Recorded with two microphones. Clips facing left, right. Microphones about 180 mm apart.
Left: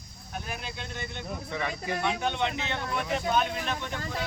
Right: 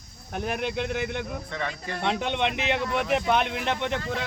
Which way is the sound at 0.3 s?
65° right (ahead or behind).